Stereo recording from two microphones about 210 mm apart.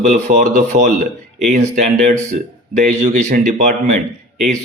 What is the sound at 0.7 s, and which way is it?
A man's voice, 40° right (ahead or behind).